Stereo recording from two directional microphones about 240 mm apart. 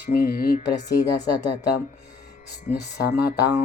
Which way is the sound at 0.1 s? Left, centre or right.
Left.